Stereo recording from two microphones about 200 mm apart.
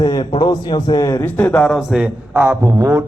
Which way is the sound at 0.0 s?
20° left (ahead or behind).